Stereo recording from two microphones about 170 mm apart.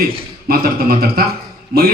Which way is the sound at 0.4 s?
65° right (ahead or behind).